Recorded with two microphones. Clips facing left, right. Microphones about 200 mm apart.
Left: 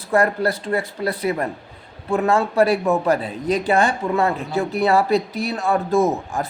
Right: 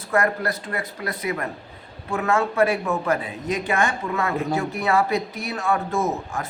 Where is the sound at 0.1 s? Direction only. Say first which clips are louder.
Left 4 dB; 30° left (ahead or behind).